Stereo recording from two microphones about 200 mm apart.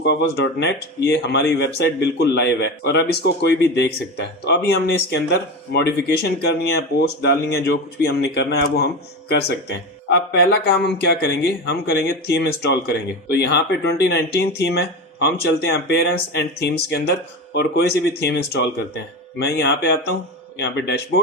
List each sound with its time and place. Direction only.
0.0 s speech: 60° left (ahead or behind)